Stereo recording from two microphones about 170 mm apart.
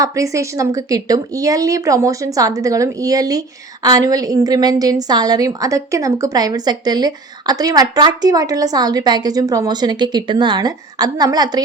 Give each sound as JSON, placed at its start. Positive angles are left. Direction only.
{"t": 0.0, "sound": "a woman's voice", "side_deg": -20}